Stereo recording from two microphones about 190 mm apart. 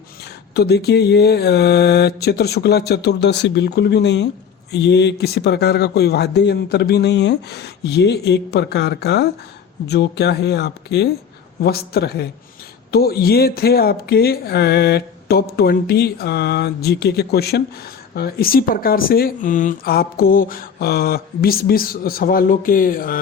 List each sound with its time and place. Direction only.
0.5 s speech: 60° left (ahead or behind)